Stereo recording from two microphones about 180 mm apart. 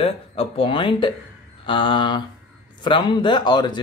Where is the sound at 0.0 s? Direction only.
30° left (ahead or behind).